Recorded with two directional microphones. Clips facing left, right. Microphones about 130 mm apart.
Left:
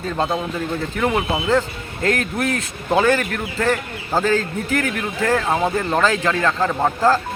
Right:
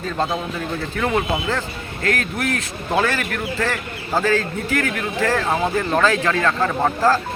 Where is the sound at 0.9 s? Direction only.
15° left (ahead or behind).